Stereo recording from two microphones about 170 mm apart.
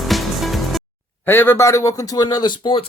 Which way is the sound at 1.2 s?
15° left (ahead or behind).